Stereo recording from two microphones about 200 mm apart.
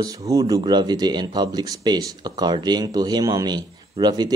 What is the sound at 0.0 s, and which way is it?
Speech, 15° right (ahead or behind).